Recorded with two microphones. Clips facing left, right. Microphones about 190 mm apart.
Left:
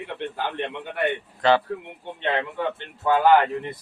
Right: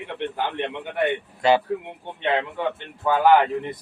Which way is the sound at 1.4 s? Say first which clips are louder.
Right 1 dB; 10° right (ahead or behind).